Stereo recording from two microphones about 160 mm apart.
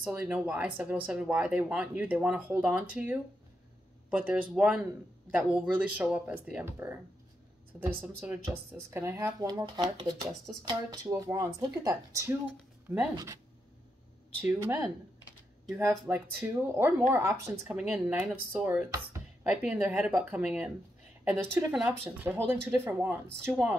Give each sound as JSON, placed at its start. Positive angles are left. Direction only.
{"t": 0.0, "sound": "speech", "side_deg": -15}
{"t": 8.0, "sound": "speech", "side_deg": -10}
{"t": 14.4, "sound": "speech", "side_deg": -15}